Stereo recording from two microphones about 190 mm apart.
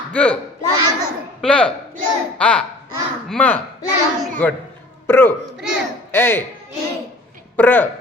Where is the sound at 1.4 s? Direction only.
5° left (ahead or behind).